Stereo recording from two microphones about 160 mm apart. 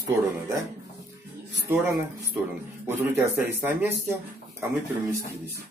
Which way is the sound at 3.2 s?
15° right (ahead or behind).